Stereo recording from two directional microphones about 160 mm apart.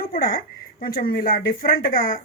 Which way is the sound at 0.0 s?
65° left (ahead or behind).